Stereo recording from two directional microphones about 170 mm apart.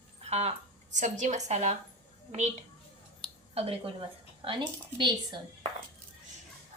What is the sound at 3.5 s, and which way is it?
A woman's voice, 35° right (ahead or behind).